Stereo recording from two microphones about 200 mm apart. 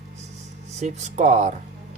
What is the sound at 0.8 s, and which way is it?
Speech, 35° right (ahead or behind).